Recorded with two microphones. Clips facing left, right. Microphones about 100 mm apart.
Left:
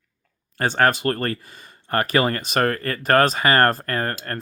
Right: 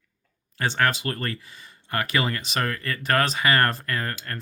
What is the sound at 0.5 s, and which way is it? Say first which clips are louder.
Speech: left 5 dB; 45° left (ahead or behind).